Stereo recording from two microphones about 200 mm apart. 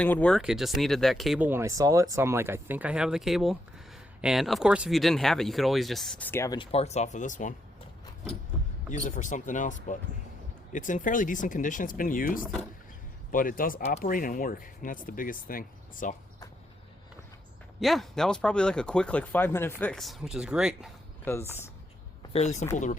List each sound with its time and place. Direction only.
0.0 s speech: 5° left (ahead or behind); by 7.5 s 40° left (ahead or behind)
8.9 s speech: 40° left (ahead or behind)
12.4 s speech: centre (ahead or behind)
13.3 s speech: 45° left (ahead or behind)
17.7 s speech: centre (ahead or behind)
21.3 s speech: 10° left (ahead or behind)
22.3 s speech: 30° left (ahead or behind)